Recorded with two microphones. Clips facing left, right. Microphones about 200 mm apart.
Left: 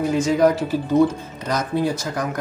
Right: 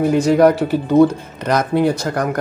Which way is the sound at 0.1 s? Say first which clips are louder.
Right 4 dB; 65° right (ahead or behind).